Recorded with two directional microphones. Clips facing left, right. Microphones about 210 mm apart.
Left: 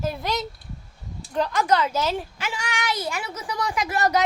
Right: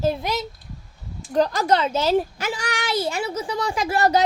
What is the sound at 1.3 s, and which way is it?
A child's voice, 35° right (ahead or behind).